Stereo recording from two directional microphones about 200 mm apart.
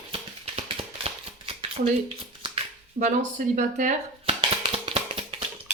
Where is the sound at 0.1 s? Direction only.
30° right (ahead or behind).